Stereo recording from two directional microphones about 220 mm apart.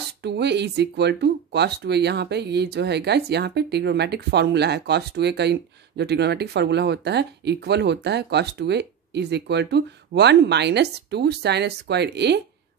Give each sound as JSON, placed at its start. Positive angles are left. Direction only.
{"t": 0.2, "sound": "speech", "side_deg": -50}